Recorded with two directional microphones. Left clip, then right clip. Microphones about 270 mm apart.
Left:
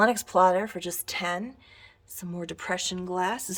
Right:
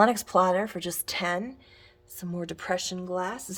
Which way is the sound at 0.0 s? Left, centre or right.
Centre.